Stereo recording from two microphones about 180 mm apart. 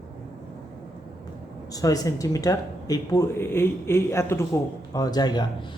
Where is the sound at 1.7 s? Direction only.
20° left (ahead or behind).